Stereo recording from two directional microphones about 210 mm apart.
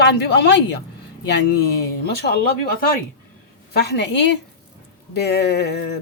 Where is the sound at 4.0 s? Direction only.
55° left (ahead or behind).